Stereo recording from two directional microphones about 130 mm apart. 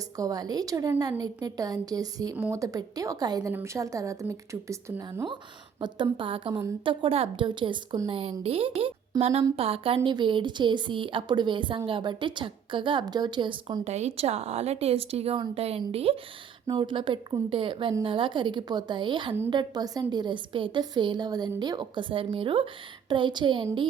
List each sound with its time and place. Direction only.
0.2 s a woman's voice: 30° right (ahead or behind)
13.8 s a woman's voice: 55° right (ahead or behind)
16.6 s a woman's voice: 35° right (ahead or behind)